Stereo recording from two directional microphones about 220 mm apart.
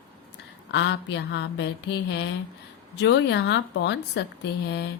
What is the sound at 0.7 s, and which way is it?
Speech, 55° left (ahead or behind).